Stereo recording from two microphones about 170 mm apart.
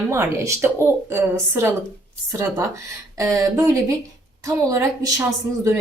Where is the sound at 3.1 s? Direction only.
20° right (ahead or behind).